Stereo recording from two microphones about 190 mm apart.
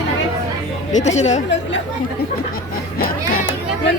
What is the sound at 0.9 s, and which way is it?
Speech, 35° left (ahead or behind).